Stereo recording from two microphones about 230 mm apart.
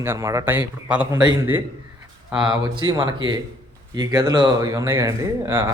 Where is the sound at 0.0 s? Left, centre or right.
Centre.